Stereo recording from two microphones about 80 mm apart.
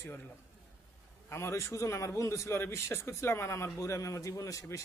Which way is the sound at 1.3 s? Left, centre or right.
Left.